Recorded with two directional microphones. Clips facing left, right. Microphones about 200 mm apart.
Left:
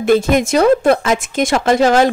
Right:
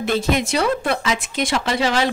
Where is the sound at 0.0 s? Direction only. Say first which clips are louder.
Left 7 dB; 50° left (ahead or behind).